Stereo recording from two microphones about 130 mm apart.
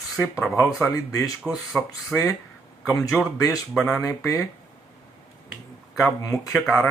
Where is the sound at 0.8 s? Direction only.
20° left (ahead or behind).